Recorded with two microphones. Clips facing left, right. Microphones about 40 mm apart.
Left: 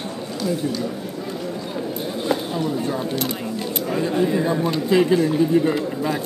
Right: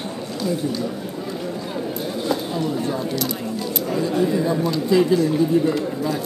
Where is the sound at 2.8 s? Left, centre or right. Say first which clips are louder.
Even; left.